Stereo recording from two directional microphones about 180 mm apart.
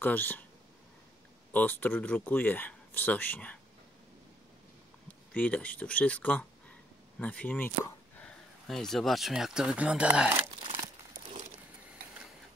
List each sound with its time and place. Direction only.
0.0 s speech: 10° left (ahead or behind)
1.5 s speech: 10° left (ahead or behind)
5.0 s speech: 10° left (ahead or behind)